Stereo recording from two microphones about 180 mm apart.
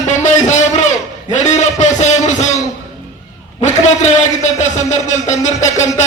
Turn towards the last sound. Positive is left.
turn(degrees=40)  # may be behind; listen again after turning